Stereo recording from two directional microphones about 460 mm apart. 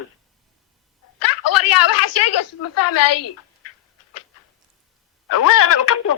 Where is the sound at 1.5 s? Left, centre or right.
Left.